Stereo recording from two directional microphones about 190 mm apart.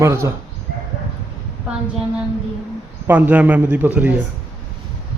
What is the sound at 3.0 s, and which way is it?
Speech, 10° right (ahead or behind).